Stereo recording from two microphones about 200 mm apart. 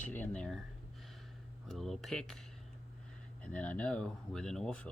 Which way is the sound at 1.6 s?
Centre (ahead or behind).